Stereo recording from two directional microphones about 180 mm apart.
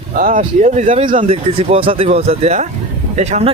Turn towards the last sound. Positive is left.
turn(degrees=-40)  # may be behind; listen again after turning